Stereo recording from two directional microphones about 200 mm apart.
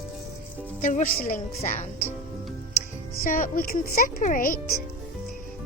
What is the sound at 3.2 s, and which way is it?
A woman's voice, 45° left (ahead or behind).